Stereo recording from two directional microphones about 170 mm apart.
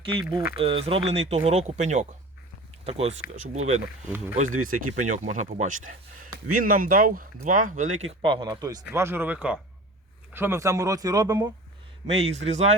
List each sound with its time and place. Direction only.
0.0 s speech: 30° right (ahead or behind)
8.8 s speech: 10° right (ahead or behind)
12.1 s speech: 40° right (ahead or behind)